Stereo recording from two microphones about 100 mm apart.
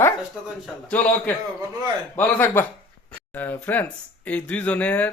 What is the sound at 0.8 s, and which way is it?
Speech, 15° left (ahead or behind).